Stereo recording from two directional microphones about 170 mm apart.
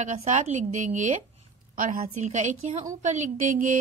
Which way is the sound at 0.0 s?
45° right (ahead or behind).